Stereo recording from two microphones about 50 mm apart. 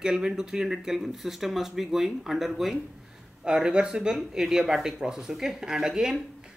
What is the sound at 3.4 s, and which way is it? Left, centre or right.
Speech, centre.